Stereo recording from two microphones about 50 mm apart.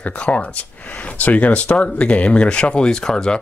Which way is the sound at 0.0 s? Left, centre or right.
Left.